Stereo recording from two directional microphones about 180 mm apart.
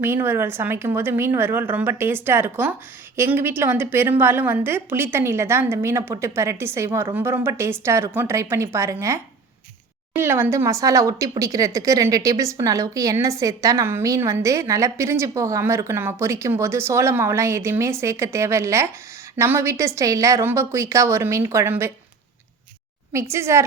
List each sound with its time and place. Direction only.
0.0 s speech: 10° right (ahead or behind)
23.3 s speech: 15° right (ahead or behind)